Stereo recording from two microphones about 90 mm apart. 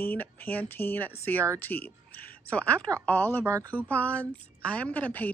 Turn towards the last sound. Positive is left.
turn(degrees=15)  # may be behind; listen again after turning